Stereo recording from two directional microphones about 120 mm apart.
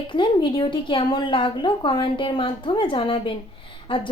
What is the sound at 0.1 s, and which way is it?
A woman's voice, 40° left (ahead or behind).